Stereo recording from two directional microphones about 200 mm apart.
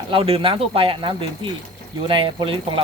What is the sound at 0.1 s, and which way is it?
Speech, 25° right (ahead or behind).